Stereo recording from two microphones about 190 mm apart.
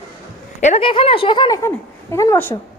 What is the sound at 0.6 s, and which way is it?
A woman's voice, 30° left (ahead or behind).